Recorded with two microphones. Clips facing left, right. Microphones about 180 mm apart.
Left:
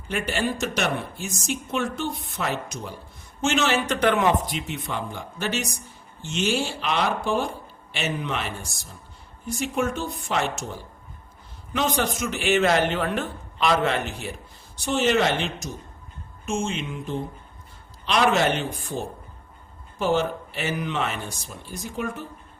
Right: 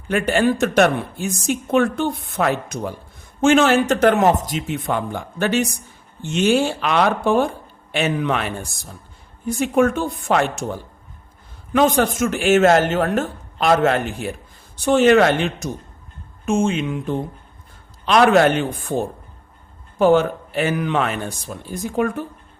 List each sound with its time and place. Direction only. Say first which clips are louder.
0.1 s speech: right 8 dB; 55° right (ahead or behind)